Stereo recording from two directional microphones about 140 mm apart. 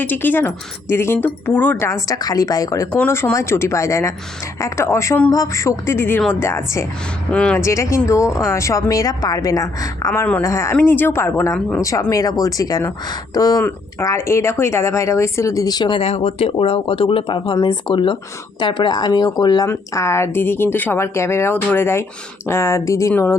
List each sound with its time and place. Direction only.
0.0 s a woman's voice: 15° left (ahead or behind)
7.3 s speech: 10° left (ahead or behind)
7.6 s a woman's voice: 20° left (ahead or behind)
10.1 s a woman's voice: 10° left (ahead or behind)